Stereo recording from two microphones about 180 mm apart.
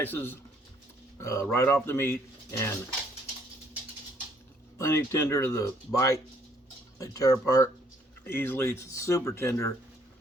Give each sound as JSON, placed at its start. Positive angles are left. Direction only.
{"t": 0.0, "sound": "speech", "side_deg": 10}
{"t": 4.8, "sound": "speech", "side_deg": 15}